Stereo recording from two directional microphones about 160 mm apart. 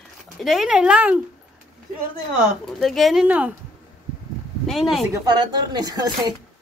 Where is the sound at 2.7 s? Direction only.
Centre (ahead or behind).